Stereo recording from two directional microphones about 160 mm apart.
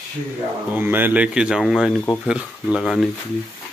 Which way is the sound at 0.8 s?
10° right (ahead or behind).